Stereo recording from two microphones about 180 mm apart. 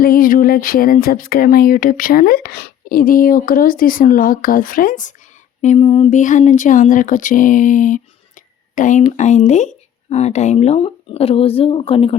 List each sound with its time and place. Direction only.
0.0 s speech: 50° left (ahead or behind)
5.6 s speech: 35° left (ahead or behind)